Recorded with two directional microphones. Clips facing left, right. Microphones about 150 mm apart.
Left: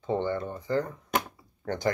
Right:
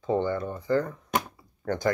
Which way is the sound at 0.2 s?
20° left (ahead or behind).